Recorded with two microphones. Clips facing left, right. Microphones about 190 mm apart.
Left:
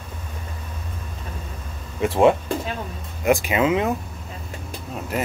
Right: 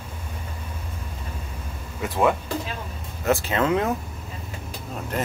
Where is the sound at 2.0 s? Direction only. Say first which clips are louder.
Left 5 dB; 25° left (ahead or behind).